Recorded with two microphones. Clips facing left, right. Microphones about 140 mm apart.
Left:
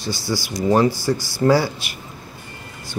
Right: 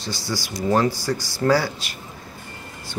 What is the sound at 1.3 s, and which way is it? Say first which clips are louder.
Speech: left 3 dB; 15° left (ahead or behind).